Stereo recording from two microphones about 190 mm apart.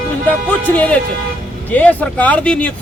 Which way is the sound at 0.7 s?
10° left (ahead or behind).